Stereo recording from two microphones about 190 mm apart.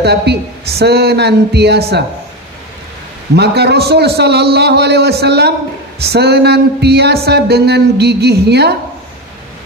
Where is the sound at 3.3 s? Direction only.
60° right (ahead or behind).